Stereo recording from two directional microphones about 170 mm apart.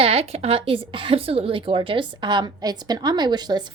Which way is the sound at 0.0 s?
35° right (ahead or behind).